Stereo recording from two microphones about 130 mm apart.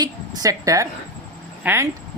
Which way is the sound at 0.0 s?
30° right (ahead or behind).